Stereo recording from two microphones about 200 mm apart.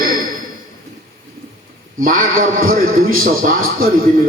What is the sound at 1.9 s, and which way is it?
A man's voice, 45° right (ahead or behind).